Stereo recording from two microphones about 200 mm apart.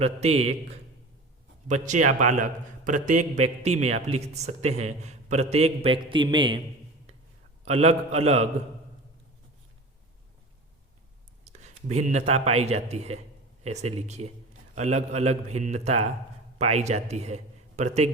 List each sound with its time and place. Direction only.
0.0 s a man's voice: 30° right (ahead or behind)
1.6 s a man's voice: 40° right (ahead or behind)
7.6 s a man's voice: 30° right (ahead or behind)
11.4 s a man's voice: 35° right (ahead or behind)